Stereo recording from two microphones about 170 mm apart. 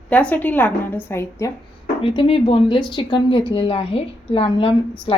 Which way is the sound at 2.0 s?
30° left (ahead or behind).